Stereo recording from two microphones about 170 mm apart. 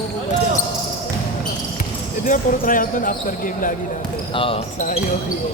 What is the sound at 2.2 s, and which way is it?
Speech, 55° left (ahead or behind).